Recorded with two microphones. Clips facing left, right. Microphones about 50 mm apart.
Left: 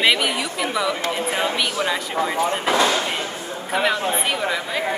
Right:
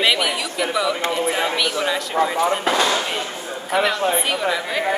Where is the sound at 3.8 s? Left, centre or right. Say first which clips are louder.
Right 2 dB; centre.